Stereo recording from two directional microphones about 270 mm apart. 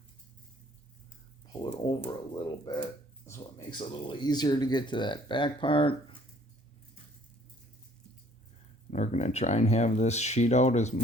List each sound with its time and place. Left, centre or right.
1.6 s speech: centre
8.9 s speech: left